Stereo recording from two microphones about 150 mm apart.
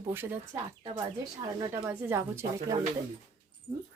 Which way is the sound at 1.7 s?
15° right (ahead or behind).